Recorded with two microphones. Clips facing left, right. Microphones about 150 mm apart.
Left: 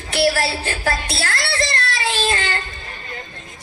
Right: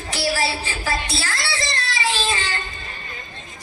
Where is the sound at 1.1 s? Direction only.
60° left (ahead or behind).